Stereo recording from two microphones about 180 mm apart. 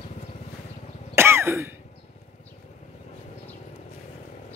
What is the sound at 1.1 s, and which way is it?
Throat clearing, 15° right (ahead or behind).